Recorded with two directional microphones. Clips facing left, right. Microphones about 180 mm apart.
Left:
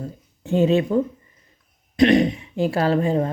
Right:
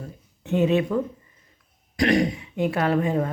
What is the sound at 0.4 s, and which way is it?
Speech, 30° left (ahead or behind).